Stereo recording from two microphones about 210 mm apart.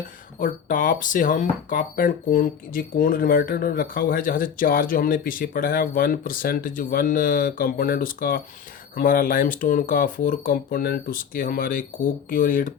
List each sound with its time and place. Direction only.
0.3 s speech: 40° left (ahead or behind)